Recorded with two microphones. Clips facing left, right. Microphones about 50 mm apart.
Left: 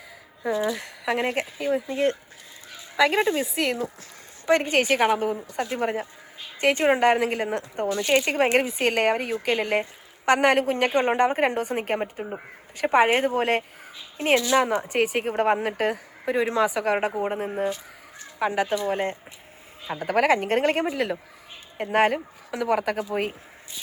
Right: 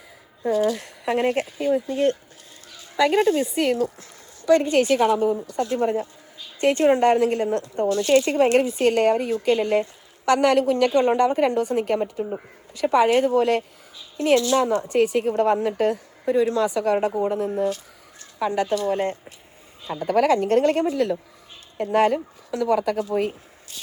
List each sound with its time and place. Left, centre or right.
0.4 s speech: left
2.6 s a sound: left
3.0 s speech: left
4.4 s speech: left